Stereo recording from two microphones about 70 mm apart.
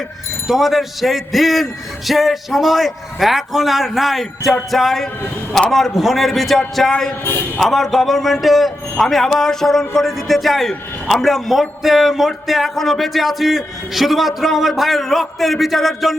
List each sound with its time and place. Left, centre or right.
0.4 s speech: centre
7.3 s a man's voice: left
7.6 s speech: centre